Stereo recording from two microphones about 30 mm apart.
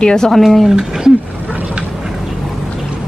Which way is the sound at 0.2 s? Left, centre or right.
Centre.